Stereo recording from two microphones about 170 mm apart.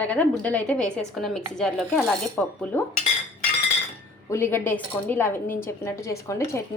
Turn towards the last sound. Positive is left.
turn(degrees=15)  # may be behind; listen again after turning